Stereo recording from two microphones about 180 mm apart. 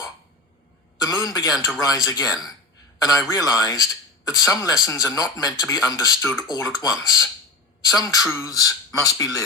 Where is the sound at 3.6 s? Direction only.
20° left (ahead or behind).